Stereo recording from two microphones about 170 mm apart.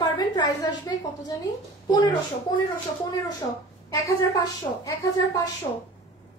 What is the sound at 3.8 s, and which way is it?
A woman's voice, 20° left (ahead or behind).